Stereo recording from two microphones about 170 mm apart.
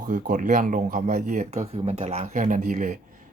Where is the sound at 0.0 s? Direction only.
50° right (ahead or behind).